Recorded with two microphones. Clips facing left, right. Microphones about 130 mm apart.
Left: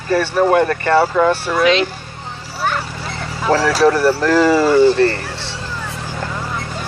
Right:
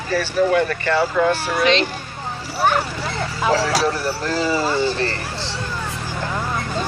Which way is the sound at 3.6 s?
75° left (ahead or behind).